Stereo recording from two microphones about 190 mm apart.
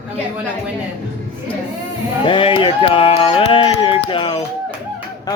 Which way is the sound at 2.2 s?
25° left (ahead or behind).